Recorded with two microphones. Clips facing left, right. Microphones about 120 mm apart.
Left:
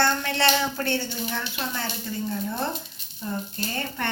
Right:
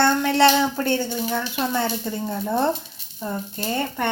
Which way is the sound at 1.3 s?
20° right (ahead or behind).